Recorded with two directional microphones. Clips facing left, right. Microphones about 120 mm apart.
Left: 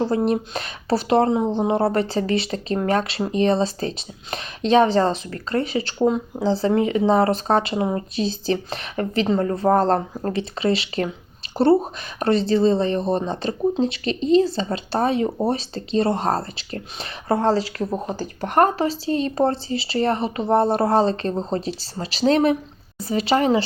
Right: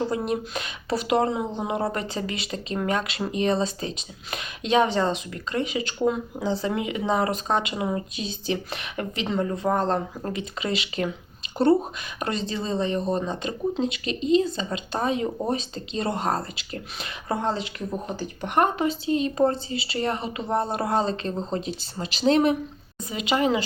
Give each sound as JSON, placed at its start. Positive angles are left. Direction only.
{"t": 0.0, "sound": "speech", "side_deg": 30}